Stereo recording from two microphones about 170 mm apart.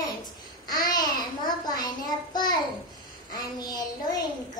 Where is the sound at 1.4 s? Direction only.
25° left (ahead or behind).